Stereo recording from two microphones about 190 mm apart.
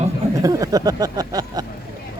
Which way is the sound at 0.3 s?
20° right (ahead or behind).